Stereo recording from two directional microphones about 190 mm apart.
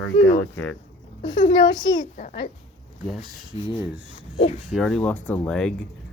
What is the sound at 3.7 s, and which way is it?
Speech, 10° right (ahead or behind).